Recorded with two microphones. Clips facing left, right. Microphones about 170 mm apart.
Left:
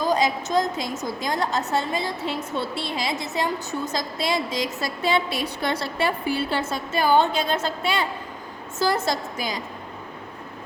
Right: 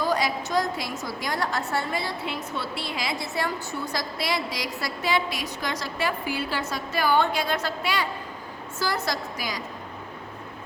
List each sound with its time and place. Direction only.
0.0 s a woman's voice: 20° left (ahead or behind)